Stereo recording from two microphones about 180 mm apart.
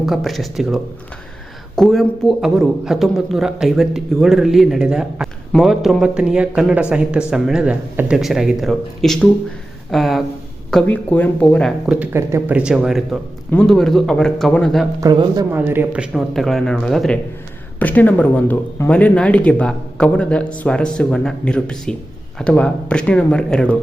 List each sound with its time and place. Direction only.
0.0 s a man's voice: centre (ahead or behind)
11.9 s a man's voice: 10° right (ahead or behind)
15.0 s speech: 20° right (ahead or behind)
15.5 s a man's voice: 10° right (ahead or behind); by 23.7 s 5° left (ahead or behind)